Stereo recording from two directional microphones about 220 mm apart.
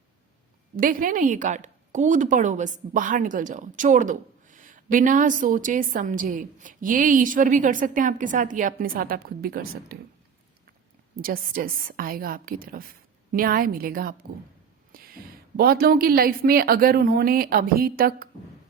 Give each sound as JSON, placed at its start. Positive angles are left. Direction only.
{"t": 0.8, "sound": "a woman's voice", "side_deg": -40}
{"t": 11.2, "sound": "a woman's voice", "side_deg": -40}